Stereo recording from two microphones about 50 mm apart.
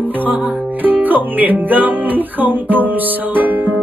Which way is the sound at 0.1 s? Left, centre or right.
Right.